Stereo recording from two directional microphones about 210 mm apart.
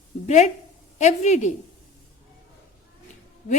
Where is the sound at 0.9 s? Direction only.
35° left (ahead or behind).